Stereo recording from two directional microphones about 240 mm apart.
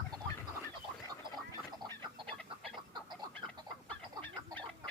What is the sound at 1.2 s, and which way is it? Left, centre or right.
Gargling, centre.